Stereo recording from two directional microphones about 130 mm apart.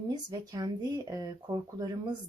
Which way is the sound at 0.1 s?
30° right (ahead or behind).